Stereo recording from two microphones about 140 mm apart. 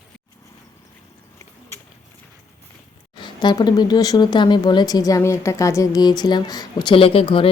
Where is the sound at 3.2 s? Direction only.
30° left (ahead or behind).